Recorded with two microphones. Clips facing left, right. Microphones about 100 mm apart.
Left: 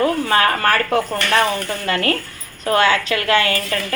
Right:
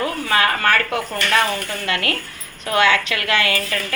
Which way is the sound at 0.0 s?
35° left (ahead or behind).